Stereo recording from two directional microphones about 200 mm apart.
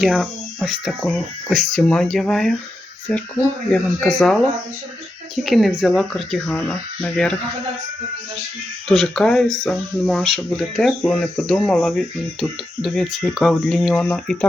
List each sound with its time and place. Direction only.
0.0 s speech: centre (ahead or behind)
5.4 s speech: centre (ahead or behind)
8.9 s speech: centre (ahead or behind)